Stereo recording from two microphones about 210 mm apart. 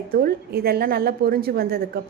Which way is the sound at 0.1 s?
45° right (ahead or behind).